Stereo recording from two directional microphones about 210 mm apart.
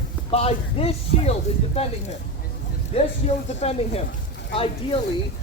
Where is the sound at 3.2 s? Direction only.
30° left (ahead or behind).